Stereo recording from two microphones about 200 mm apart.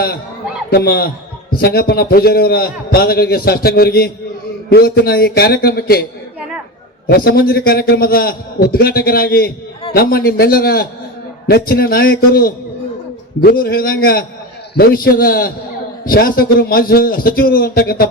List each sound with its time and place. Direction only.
0.7 s a man's voice: 50° left (ahead or behind)
7.1 s a man's voice: 50° left (ahead or behind)